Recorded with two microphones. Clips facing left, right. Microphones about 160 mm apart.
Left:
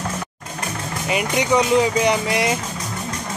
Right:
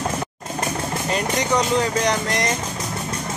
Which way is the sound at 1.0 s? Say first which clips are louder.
Left 3 dB; 5° left (ahead or behind).